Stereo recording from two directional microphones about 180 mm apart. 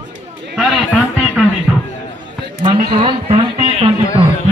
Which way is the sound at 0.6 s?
Centre (ahead or behind).